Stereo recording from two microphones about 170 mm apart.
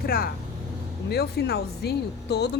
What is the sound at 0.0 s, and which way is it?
Speech, 60° left (ahead or behind).